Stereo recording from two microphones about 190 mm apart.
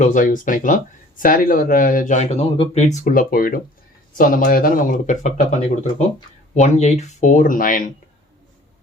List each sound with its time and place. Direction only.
0.0 s speech: 45° left (ahead or behind)